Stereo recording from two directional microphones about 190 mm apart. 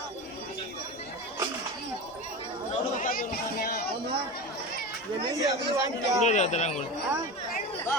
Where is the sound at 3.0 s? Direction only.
50° left (ahead or behind).